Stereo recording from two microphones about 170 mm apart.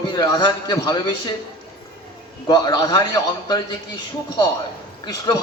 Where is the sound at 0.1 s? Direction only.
25° left (ahead or behind).